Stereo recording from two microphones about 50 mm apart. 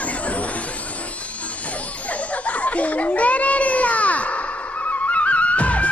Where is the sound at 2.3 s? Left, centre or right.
Left.